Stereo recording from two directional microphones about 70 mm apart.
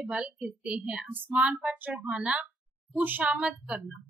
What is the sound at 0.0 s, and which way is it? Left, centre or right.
A woman's voice, centre.